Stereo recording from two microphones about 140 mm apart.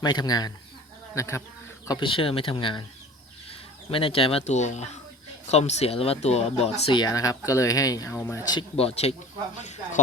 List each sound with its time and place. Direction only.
0.0 s speech: 30° left (ahead or behind)
1.9 s speech: 35° left (ahead or behind)
3.9 s speech: 40° left (ahead or behind)
6.9 s speech: 30° left (ahead or behind)
8.7 s speech: 45° left (ahead or behind)